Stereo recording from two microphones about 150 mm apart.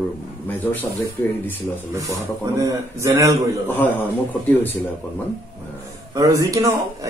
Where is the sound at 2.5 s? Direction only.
20° right (ahead or behind).